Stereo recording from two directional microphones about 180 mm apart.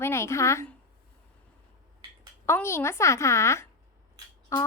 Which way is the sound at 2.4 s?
15° left (ahead or behind).